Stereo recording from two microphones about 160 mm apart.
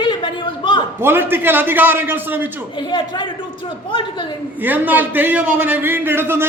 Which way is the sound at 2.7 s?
30° left (ahead or behind).